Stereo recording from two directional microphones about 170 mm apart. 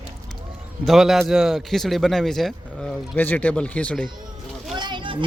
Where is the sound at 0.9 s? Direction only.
Centre (ahead or behind).